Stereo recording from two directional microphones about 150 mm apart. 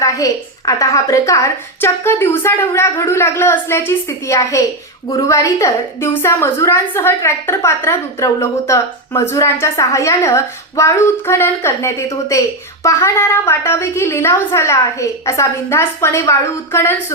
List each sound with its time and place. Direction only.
0.0 s a woman's voice: 25° left (ahead or behind)